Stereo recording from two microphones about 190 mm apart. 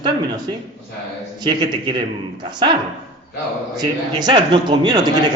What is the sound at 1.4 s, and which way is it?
Speech, 25° right (ahead or behind).